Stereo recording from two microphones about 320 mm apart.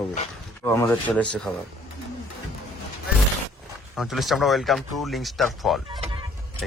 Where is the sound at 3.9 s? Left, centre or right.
Centre.